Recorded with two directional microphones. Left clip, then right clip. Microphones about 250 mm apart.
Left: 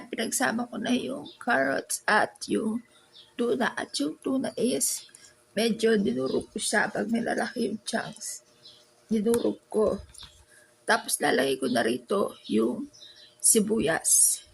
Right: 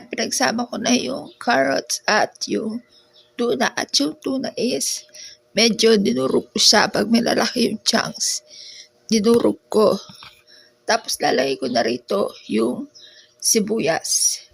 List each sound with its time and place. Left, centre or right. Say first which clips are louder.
0.1 s speech: right 7 dB; centre
5.5 s speech: right 9 dB; right
9.1 s speech: right 9 dB; right
10.8 s speech: right 6 dB; centre